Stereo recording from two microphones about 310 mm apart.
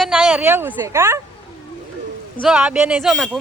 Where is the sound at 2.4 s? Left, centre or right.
Centre.